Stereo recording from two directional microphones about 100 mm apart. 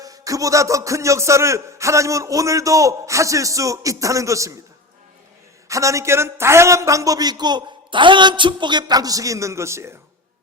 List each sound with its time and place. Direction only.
0.0 s speech: 35° right (ahead or behind)
5.6 s speech: 30° right (ahead or behind)